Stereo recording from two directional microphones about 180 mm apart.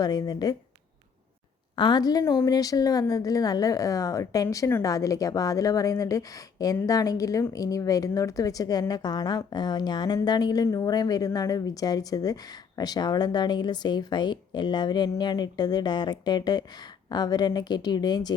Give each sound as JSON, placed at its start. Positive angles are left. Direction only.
{"t": 0.0, "sound": "speech", "side_deg": 20}
{"t": 1.7, "sound": "speech", "side_deg": 25}